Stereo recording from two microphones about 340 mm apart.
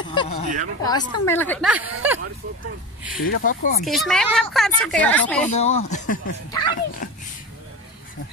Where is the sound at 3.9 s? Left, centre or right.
Centre.